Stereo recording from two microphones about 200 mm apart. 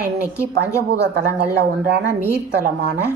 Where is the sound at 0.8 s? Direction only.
55° right (ahead or behind).